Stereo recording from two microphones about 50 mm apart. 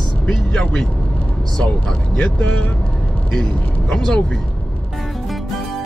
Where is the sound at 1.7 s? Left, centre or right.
Left.